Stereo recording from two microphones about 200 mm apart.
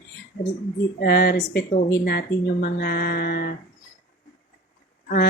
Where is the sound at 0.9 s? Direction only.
55° left (ahead or behind).